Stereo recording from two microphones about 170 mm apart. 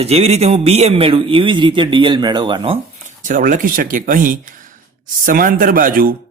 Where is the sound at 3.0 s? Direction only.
50° right (ahead or behind).